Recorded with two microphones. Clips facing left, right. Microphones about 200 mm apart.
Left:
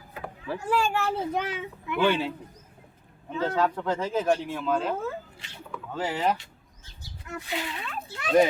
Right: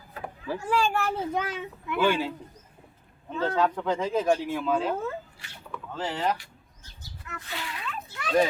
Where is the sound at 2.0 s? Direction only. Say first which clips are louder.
Even; 10° right (ahead or behind).